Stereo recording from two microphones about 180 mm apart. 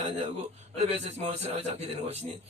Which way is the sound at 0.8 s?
35° right (ahead or behind).